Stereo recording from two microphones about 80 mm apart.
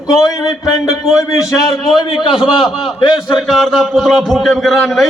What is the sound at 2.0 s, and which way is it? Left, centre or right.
Speech, left.